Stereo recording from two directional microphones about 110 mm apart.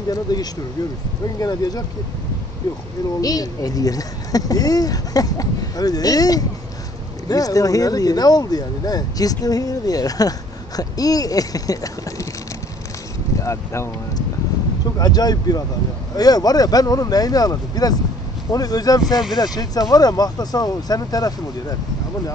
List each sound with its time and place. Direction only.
0.1 s speech: 35° left (ahead or behind)
3.2 s speech: 35° left (ahead or behind)
13.4 s speech: 30° left (ahead or behind)